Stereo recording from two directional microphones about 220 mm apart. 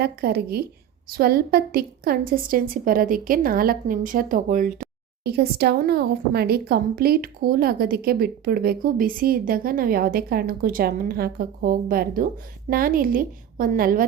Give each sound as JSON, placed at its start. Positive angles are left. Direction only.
{"t": 0.0, "sound": "a woman's voice", "side_deg": -45}